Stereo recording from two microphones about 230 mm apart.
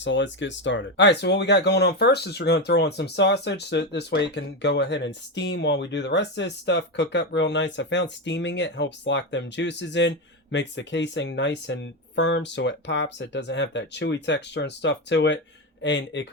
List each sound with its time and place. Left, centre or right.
0.0 s speech: left